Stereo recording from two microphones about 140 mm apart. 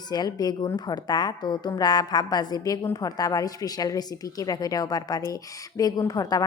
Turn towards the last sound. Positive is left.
turn(degrees=25)  # may be behind; listen again after turning